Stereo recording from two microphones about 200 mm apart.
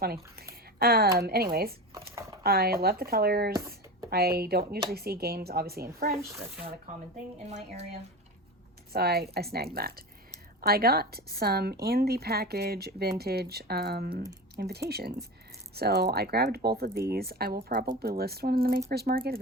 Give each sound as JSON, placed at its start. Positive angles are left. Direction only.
{"t": 0.0, "sound": "speech", "side_deg": -50}
{"t": 2.4, "sound": "a woman's voice", "side_deg": -50}
{"t": 6.2, "sound": "speech", "side_deg": -15}
{"t": 7.4, "sound": "speech", "side_deg": -35}
{"t": 8.9, "sound": "a woman's voice", "side_deg": -50}